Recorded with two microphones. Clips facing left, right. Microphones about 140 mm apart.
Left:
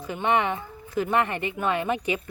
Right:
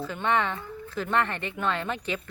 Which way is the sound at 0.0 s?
15° left (ahead or behind).